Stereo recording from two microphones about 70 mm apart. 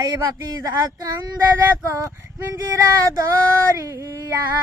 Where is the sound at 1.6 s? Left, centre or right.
Right.